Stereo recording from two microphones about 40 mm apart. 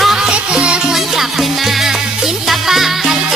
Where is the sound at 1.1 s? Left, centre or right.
Centre.